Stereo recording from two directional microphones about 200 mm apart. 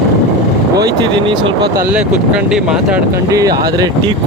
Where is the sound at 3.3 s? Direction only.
20° right (ahead or behind).